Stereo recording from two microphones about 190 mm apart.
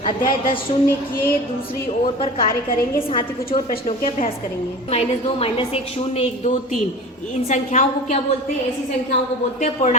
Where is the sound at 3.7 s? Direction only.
40° left (ahead or behind).